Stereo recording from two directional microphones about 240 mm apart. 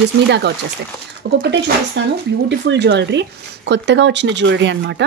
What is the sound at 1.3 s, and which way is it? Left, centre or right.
Speech, right.